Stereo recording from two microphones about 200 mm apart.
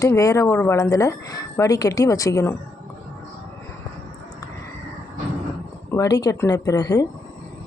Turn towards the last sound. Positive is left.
turn(degrees=15)  # may be behind; listen again after turning